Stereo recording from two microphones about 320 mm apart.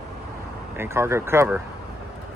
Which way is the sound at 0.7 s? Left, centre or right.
Centre.